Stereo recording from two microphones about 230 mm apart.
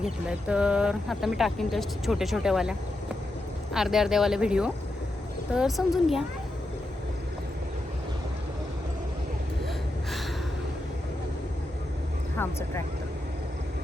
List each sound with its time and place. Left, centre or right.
0.0 s speech: centre
12.4 s speech: centre